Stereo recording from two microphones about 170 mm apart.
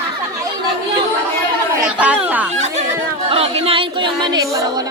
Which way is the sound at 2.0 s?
10° right (ahead or behind).